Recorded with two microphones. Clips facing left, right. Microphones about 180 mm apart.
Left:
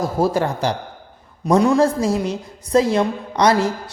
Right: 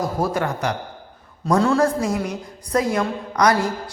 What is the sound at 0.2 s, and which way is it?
Speech, 30° left (ahead or behind).